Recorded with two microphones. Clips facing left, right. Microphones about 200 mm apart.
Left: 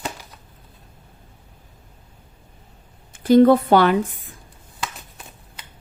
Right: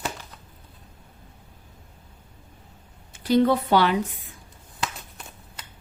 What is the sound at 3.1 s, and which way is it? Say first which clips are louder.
Speech: left 7 dB; 50° left (ahead or behind).